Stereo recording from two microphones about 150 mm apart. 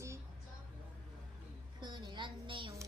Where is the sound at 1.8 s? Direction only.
30° right (ahead or behind).